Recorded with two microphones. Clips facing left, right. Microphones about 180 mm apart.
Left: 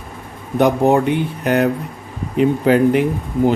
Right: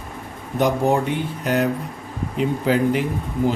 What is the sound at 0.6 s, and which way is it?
Speech, 60° left (ahead or behind).